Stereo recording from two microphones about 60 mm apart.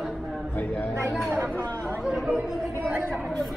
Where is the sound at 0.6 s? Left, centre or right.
Left.